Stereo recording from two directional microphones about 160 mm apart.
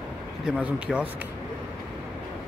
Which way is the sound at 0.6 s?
5° right (ahead or behind).